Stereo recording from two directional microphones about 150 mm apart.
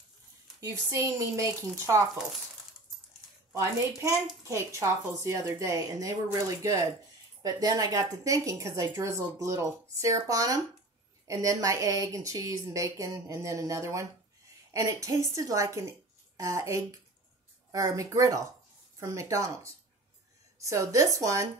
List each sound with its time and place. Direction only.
0.6 s a woman's voice: 20° right (ahead or behind)
3.5 s a woman's voice: 20° right (ahead or behind)